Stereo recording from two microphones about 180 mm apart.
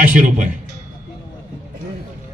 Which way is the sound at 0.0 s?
45° right (ahead or behind).